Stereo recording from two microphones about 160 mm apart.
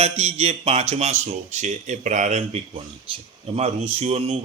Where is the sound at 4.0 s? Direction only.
40° right (ahead or behind).